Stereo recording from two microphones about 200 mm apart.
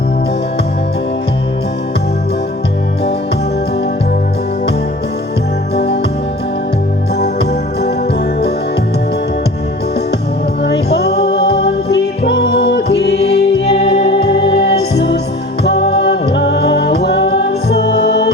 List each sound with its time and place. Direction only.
5.7 s music: 55° left (ahead or behind)
7.2 s music: 55° left (ahead or behind)
10.6 s music: 55° left (ahead or behind)
14.1 s music: 25° left (ahead or behind)
14.5 s music: 55° left (ahead or behind)